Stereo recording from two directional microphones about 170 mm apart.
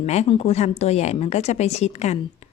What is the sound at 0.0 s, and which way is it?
A woman's voice, 40° left (ahead or behind).